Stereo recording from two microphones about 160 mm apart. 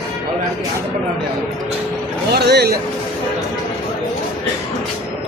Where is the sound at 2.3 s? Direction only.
90° right.